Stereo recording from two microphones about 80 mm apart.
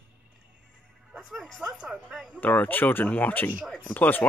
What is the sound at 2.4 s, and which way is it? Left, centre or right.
Speech, left.